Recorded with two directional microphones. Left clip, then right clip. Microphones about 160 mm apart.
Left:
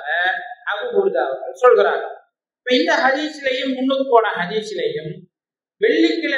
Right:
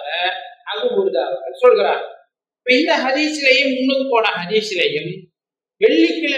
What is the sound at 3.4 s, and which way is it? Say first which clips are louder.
Speech: right 6 dB; 45° right (ahead or behind).